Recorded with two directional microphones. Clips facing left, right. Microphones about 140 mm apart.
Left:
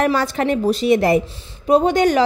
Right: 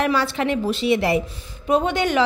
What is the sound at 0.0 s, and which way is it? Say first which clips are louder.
A woman's voice: left 3 dB; 45° left (ahead or behind).